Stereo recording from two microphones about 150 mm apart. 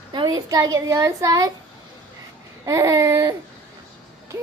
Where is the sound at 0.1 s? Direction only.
30° right (ahead or behind).